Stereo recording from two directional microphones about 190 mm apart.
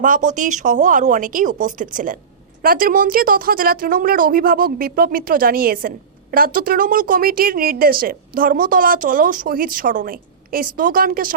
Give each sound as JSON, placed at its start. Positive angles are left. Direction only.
{"t": 0.0, "sound": "speech", "side_deg": -45}